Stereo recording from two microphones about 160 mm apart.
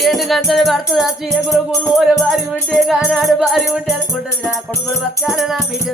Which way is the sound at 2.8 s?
Centre (ahead or behind).